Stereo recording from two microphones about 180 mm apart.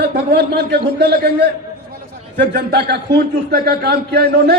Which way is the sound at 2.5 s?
60° right (ahead or behind).